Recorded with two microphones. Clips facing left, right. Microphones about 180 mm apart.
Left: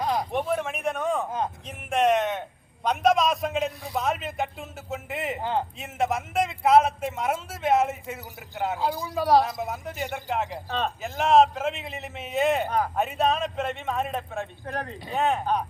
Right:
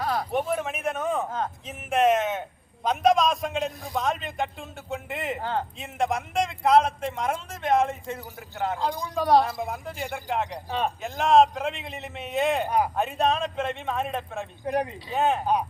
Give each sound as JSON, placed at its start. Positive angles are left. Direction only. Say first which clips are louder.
{"t": 0.0, "sound": "a sound", "louder": "left 1 dB", "side_deg": 15}
{"t": 0.3, "sound": "a man's voice", "louder": "even", "side_deg": 0}
{"t": 5.4, "sound": "speech", "louder": "left 3 dB", "side_deg": 15}
{"t": 5.8, "sound": "a man's voice", "louder": "even", "side_deg": 0}
{"t": 10.7, "sound": "speech", "louder": "right 2 dB", "side_deg": -10}
{"t": 11.0, "sound": "a man's voice", "louder": "even", "side_deg": 0}
{"t": 12.6, "sound": "speech", "louder": "right 2 dB", "side_deg": -10}
{"t": 13.0, "sound": "a man's voice", "louder": "even", "side_deg": 0}
{"t": 14.6, "sound": "speech", "louder": "right 6 dB", "side_deg": -15}
{"t": 15.1, "sound": "a man's voice", "louder": "right 1 dB", "side_deg": 0}